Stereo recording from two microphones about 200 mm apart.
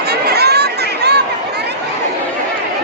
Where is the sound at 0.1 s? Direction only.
55° right (ahead or behind).